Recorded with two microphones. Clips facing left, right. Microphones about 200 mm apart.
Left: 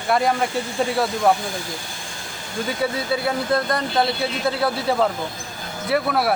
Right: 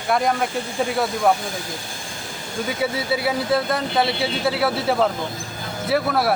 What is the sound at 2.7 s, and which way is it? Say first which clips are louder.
Speech: even; centre (ahead or behind).